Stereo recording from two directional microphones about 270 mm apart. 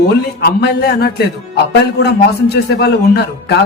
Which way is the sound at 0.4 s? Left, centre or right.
Left.